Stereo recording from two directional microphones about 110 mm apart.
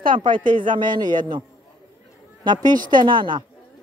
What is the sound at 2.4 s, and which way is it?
Speech, 40° right (ahead or behind).